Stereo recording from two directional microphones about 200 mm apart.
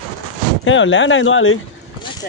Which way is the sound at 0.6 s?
70° left (ahead or behind).